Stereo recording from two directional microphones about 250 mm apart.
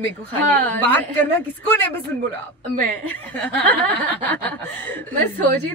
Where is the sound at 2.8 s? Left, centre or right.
Centre.